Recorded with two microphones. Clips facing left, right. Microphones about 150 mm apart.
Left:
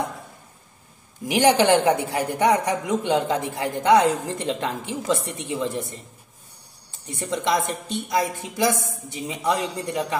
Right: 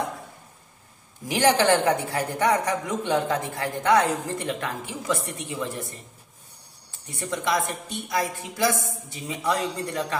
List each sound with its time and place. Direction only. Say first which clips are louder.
1.2 s a woman's voice: left 3 dB; 15° left (ahead or behind)
7.2 s a woman's voice: left 2 dB; 25° left (ahead or behind)